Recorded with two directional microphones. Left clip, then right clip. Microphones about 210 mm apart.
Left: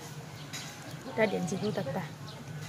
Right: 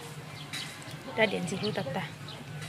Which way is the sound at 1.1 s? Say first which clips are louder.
Right 1 dB; 10° left (ahead or behind).